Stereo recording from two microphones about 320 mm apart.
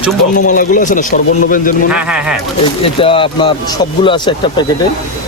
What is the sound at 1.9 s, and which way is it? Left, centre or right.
Speech, centre.